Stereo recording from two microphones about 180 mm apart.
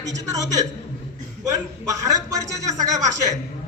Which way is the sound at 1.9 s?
20° right (ahead or behind).